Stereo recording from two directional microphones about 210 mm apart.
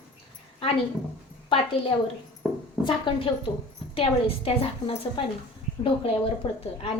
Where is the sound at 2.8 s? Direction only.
20° left (ahead or behind).